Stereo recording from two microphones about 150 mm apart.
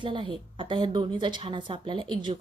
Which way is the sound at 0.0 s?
35° right (ahead or behind).